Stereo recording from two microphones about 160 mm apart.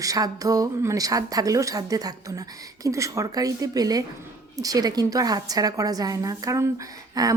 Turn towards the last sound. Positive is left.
turn(degrees=-20)  # may be behind; listen again after turning